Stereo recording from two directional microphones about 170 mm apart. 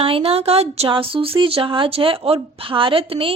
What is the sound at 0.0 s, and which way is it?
Speech, 35° right (ahead or behind).